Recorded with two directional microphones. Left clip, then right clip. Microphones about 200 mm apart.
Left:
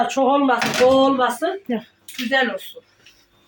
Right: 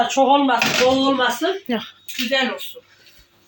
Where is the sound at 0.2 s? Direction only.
25° left (ahead or behind).